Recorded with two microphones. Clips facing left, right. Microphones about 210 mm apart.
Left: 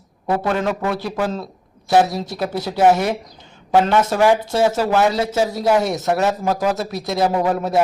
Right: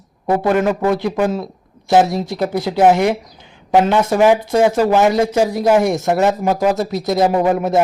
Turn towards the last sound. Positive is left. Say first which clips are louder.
# right 4 dB
turn(degrees=-20)  # may be behind; listen again after turning